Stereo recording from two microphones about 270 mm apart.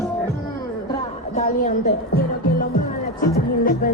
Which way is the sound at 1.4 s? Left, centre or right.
Left.